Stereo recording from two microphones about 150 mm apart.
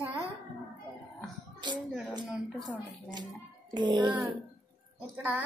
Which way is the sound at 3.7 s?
30° right (ahead or behind).